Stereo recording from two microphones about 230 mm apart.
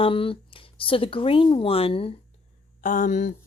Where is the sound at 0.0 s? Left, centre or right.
Left.